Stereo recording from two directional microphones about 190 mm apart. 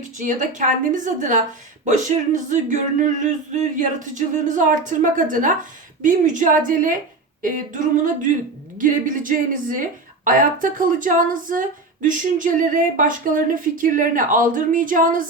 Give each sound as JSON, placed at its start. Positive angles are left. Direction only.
{"t": 0.2, "sound": "a woman's voice", "side_deg": -40}